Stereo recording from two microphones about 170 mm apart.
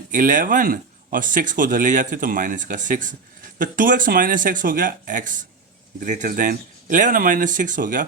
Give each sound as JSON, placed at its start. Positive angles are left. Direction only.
{"t": 0.1, "sound": "speech", "side_deg": -50}